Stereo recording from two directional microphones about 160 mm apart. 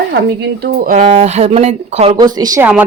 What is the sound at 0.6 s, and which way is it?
Speech, 55° right (ahead or behind).